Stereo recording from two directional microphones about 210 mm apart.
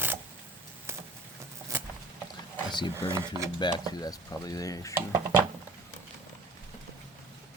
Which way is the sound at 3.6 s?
20° left (ahead or behind).